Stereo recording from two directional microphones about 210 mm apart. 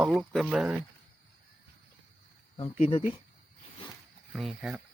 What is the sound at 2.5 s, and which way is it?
Speech, 35° left (ahead or behind).